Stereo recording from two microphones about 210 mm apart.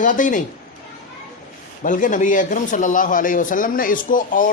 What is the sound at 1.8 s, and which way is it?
A man's voice, 40° left (ahead or behind).